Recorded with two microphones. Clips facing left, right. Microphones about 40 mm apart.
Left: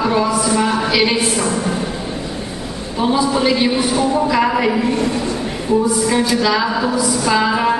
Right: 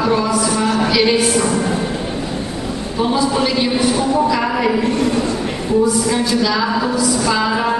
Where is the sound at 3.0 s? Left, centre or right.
Centre.